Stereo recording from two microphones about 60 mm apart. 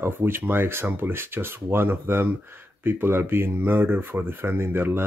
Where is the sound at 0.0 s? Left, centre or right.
Right.